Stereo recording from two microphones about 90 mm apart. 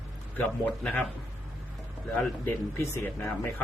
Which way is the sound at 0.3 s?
15° left (ahead or behind).